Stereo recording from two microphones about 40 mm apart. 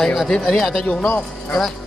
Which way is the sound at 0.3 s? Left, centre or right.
Centre.